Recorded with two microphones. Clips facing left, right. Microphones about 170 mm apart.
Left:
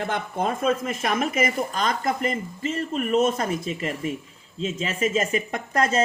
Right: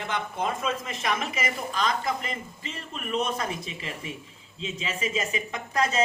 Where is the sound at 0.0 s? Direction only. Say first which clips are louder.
Left 4 dB; 50° left (ahead or behind).